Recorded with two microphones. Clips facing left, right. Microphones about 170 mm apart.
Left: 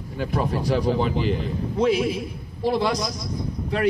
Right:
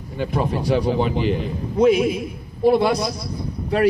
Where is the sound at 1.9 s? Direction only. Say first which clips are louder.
Right 5 dB; 30° left (ahead or behind).